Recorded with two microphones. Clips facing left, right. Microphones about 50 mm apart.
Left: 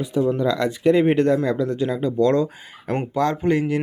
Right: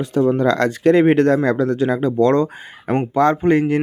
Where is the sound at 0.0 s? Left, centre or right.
Right.